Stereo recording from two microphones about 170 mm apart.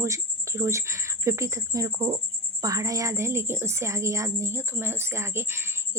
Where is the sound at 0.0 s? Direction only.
15° right (ahead or behind).